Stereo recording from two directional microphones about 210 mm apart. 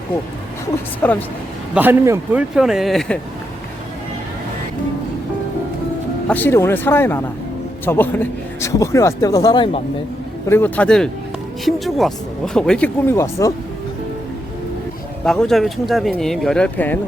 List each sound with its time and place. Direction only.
1.0 s a man's voice: 10° left (ahead or behind)
1.7 s speech: 10° right (ahead or behind)
6.2 s a man's voice: 10° left (ahead or behind)
10.4 s a man's voice: 10° left (ahead or behind)
15.2 s speech: 5° left (ahead or behind)